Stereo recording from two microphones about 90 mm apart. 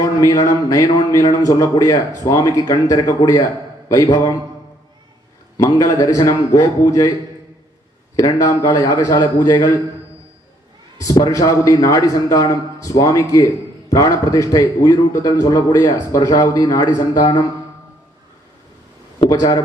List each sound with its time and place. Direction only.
0.0 s a man's voice: 40° left (ahead or behind)
5.5 s a man's voice: 45° left (ahead or behind)
8.2 s a man's voice: 40° left (ahead or behind)
11.0 s a man's voice: 40° left (ahead or behind)
19.3 s speech: 45° left (ahead or behind)